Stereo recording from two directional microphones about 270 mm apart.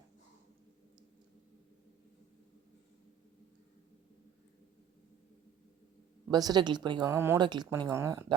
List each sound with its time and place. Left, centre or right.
6.3 s speech: centre